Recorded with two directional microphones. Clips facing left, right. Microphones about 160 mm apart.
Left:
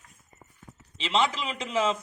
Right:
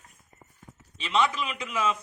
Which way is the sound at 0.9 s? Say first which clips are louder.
Even; 25° left (ahead or behind).